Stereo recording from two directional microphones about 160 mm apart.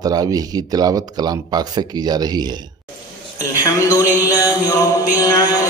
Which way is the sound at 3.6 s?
20° left (ahead or behind).